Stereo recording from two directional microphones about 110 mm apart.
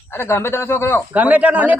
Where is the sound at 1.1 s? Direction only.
15° right (ahead or behind).